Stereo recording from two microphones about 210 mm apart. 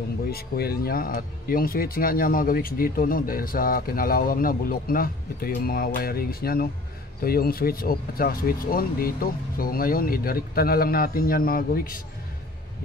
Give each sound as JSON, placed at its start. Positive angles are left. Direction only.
{"t": 0.3, "sound": "speech", "side_deg": 45}